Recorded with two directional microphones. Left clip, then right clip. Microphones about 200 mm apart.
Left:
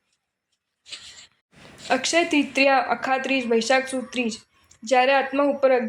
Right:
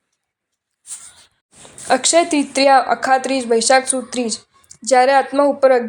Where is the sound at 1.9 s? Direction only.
40° right (ahead or behind).